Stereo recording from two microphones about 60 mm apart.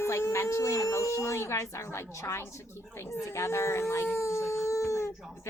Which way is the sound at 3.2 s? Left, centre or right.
Left.